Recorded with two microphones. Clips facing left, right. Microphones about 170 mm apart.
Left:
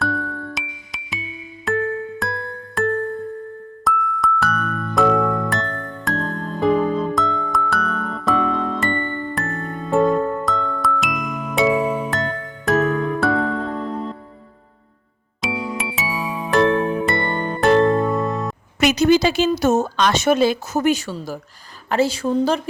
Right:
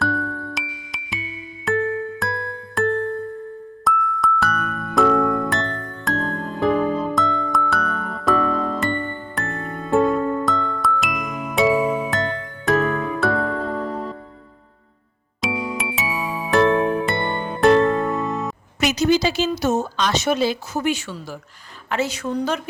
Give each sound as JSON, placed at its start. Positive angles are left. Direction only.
{"t": 0.0, "sound": "music", "side_deg": 0}
{"t": 15.4, "sound": "music", "side_deg": 0}
{"t": 18.8, "sound": "speech", "side_deg": 60}